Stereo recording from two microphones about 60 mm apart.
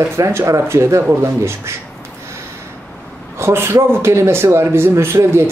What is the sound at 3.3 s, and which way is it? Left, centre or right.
Speech, right.